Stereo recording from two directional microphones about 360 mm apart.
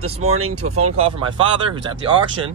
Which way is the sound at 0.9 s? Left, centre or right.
Centre.